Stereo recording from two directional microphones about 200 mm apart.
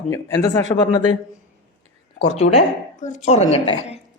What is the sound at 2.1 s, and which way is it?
A woman's voice, 30° left (ahead or behind).